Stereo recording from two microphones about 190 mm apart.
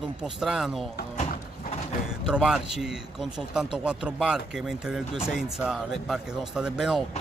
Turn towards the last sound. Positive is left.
turn(degrees=0)  # may be behind; listen again after turning